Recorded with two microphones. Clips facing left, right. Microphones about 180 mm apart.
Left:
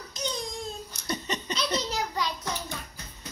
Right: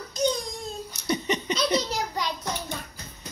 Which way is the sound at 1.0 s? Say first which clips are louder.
Right 6 dB; 15° right (ahead or behind).